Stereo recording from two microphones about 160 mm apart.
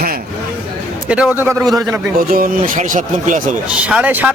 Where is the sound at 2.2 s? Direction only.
65° right (ahead or behind).